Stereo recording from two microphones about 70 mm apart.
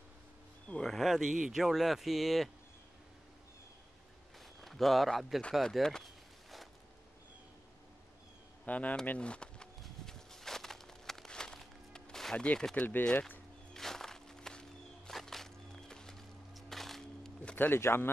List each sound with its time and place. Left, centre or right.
0.8 s speech: centre
4.6 s speech: centre
5.5 s a sound: centre
8.6 s speech: left
9.8 s a sound: centre
12.7 s speech: left
13.0 s speech: centre
13.7 s music: centre
17.6 s a man's voice: left